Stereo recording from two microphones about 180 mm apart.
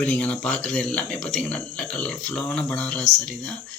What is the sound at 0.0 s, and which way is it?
Speech, 10° left (ahead or behind).